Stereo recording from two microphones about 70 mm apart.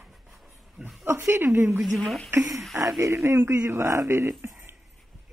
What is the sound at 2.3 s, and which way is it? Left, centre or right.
Speech, right.